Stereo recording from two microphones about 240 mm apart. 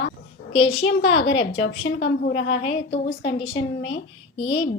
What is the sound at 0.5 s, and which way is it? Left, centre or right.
Speech, centre.